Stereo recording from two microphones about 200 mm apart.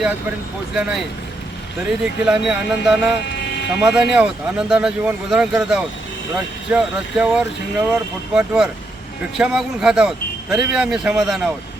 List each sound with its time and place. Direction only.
0.8 s speech: 5° right (ahead or behind)
3.2 s vehicle: 55° left (ahead or behind)
3.8 s speech: 5° right (ahead or behind)